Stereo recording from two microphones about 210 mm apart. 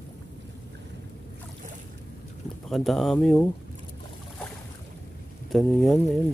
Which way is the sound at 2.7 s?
Centre (ahead or behind).